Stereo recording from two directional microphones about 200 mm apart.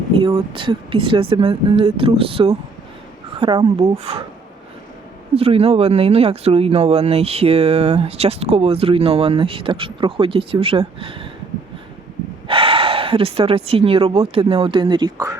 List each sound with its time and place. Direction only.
0.1 s speech: 25° right (ahead or behind)
5.3 s speech: 30° right (ahead or behind)
12.5 s speech: 25° right (ahead or behind)